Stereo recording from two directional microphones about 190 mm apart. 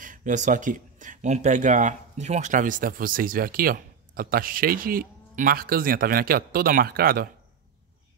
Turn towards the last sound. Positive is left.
turn(degrees=-50)  # may be behind; listen again after turning